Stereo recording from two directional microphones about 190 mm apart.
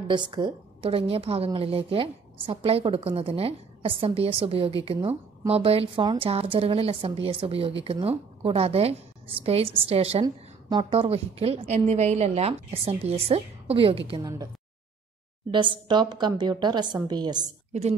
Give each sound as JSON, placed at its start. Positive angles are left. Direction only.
{"t": 0.1, "sound": "a woman's voice", "side_deg": -25}
{"t": 15.5, "sound": "a woman's voice", "side_deg": -25}